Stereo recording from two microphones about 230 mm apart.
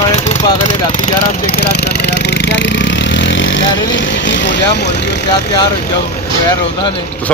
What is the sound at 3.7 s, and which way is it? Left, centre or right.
Speech, left.